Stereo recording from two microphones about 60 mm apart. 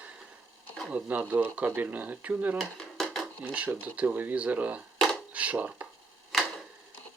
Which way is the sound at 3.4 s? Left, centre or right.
Right.